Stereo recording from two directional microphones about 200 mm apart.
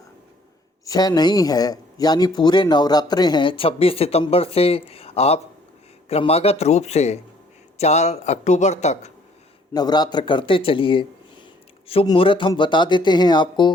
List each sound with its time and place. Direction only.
0.9 s a man's voice: 20° left (ahead or behind)
9.7 s speech: 20° left (ahead or behind)